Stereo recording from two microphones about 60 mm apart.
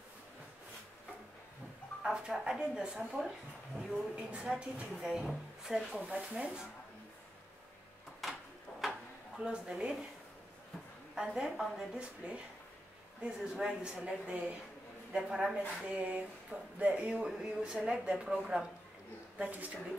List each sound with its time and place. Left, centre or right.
2.0 s a sound: centre
2.4 s speech: centre
6.0 s speech: centre
8.8 s a sound: centre
9.4 s speech: centre
11.1 s speech: centre
12.2 s speech: right
19.3 s speech: right